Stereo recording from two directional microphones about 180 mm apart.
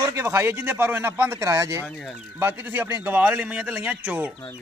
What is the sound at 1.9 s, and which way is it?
Speech, 5° left (ahead or behind).